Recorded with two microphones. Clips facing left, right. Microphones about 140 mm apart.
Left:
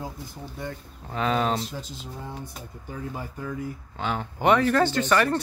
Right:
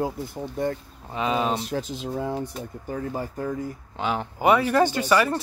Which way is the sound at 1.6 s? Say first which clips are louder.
Right 8 dB; 80° right.